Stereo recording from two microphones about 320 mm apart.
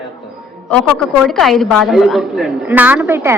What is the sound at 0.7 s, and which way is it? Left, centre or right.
A woman's voice, centre.